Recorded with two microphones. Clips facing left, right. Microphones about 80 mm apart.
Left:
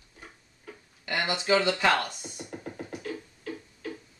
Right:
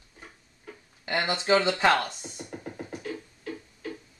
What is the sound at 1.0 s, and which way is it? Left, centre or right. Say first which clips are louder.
Speech: right 2 dB; right.